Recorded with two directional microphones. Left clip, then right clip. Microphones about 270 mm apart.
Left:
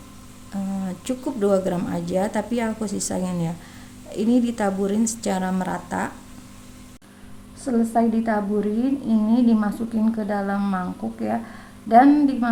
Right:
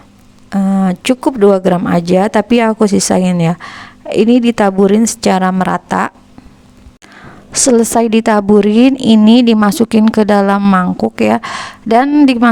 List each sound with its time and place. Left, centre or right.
0.5 s speech: right
7.5 s speech: right